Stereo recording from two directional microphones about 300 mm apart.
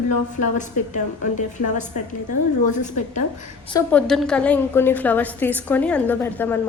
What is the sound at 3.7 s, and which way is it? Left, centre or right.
A woman's voice, centre.